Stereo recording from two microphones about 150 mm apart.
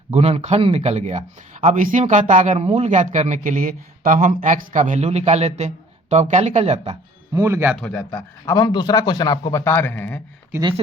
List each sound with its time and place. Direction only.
0.1 s speech: 45° right (ahead or behind)
7.3 s speech: 20° right (ahead or behind)
7.8 s a man's voice: 10° left (ahead or behind)
8.5 s a man's voice: 25° left (ahead or behind)